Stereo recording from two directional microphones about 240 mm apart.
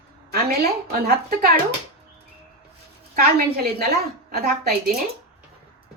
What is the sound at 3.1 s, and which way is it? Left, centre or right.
A woman's voice, right.